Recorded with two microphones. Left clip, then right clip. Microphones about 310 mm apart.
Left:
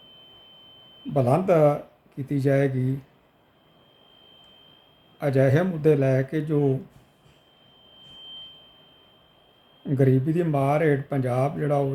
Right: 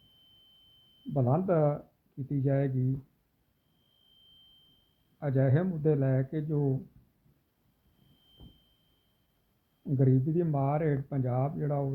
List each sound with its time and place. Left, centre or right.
1.1 s speech: centre
5.2 s speech: centre
9.9 s speech: centre